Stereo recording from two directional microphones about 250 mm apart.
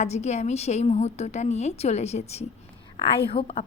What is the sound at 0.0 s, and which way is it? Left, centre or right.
A woman's voice, left.